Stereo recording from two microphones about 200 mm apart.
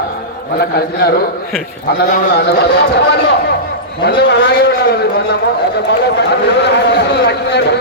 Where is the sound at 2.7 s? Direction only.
55° left (ahead or behind).